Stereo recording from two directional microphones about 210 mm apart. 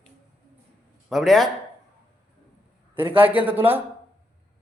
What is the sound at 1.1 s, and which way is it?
Speech, centre (ahead or behind).